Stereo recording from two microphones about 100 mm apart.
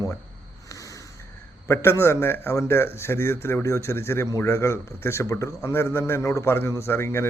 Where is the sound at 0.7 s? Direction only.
35° left (ahead or behind).